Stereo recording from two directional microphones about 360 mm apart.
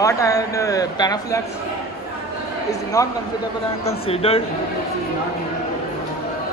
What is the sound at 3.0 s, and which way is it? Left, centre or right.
Speech, centre.